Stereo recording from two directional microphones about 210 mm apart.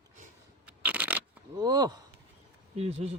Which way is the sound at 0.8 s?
5° right (ahead or behind).